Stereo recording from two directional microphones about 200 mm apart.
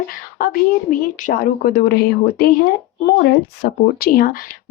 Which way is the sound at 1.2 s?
50° left (ahead or behind).